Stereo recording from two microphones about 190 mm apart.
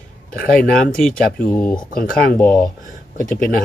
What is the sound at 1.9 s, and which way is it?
Speech, 50° left (ahead or behind).